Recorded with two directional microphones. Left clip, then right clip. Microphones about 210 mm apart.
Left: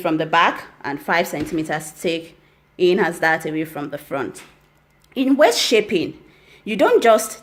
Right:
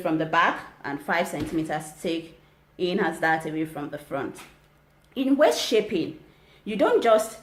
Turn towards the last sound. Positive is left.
turn(degrees=45)  # may be behind; listen again after turning